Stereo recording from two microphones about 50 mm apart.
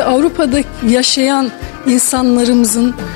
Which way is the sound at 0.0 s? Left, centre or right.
Left.